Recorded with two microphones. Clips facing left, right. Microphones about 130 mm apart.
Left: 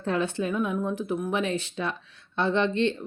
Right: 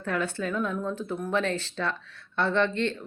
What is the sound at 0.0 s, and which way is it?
Speech, 20° left (ahead or behind).